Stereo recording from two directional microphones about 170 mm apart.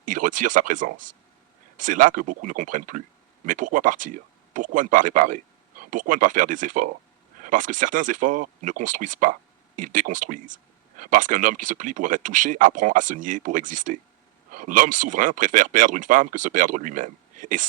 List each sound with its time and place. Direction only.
0.0 s speech: 50° right (ahead or behind)